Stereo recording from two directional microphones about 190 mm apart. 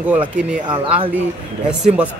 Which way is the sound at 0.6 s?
30° right (ahead or behind).